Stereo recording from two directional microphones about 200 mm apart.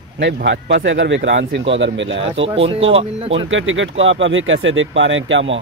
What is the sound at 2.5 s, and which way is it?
Speech, 30° right (ahead or behind).